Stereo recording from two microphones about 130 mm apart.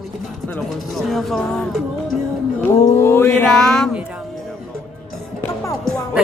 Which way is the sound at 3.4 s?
5° left (ahead or behind).